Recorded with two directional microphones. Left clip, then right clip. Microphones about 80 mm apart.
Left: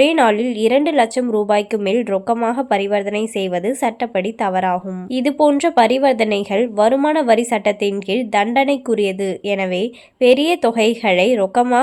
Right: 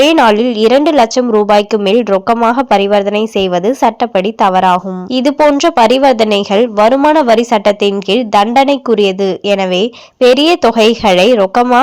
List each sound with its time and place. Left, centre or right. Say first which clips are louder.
0.0 s a woman's voice: right 6 dB; right